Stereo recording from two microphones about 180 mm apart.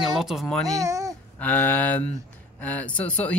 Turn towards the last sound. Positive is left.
turn(degrees=5)  # may be behind; listen again after turning